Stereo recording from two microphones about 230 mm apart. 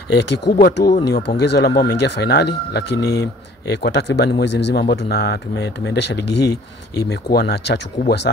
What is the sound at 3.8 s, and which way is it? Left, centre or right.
Speech, left.